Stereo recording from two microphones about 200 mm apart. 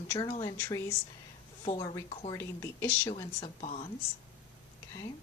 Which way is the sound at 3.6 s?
30° left (ahead or behind).